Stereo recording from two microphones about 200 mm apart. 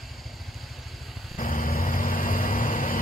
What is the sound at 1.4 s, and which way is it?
Vehicle, 40° left (ahead or behind).